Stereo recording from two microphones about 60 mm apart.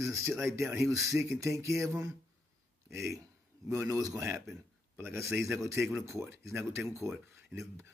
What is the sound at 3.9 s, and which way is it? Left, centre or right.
Speech, right.